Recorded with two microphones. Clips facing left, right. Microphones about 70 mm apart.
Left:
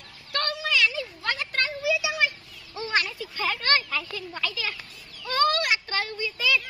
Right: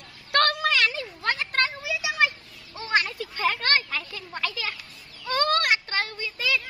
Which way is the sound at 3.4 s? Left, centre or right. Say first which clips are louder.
Right 1 dB; right.